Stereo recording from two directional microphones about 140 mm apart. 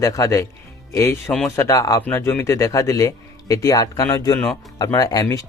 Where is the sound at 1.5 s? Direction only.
20° left (ahead or behind).